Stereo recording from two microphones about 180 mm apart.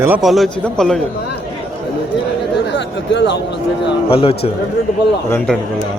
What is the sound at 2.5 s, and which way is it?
Speech, 75° left (ahead or behind).